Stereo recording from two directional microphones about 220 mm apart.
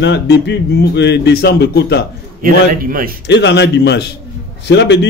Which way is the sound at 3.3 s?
55° left (ahead or behind).